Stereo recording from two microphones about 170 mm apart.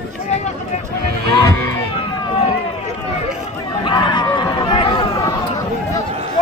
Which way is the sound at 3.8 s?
25° left (ahead or behind).